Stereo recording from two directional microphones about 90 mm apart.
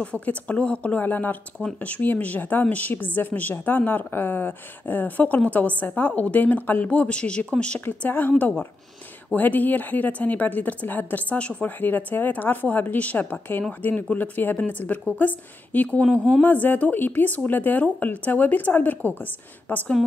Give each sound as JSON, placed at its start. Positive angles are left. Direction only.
{"t": 0.0, "sound": "a woman's voice", "side_deg": 15}